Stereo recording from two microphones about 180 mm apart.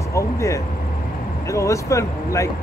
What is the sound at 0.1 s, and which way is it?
Speech, 15° left (ahead or behind).